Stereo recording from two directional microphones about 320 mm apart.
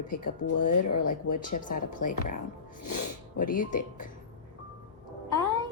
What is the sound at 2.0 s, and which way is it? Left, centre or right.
Speech, left.